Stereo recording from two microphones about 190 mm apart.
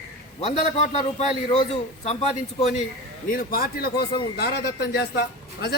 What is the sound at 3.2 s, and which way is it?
A man's voice, 50° left (ahead or behind).